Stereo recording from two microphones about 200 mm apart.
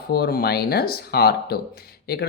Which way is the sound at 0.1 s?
50° left (ahead or behind).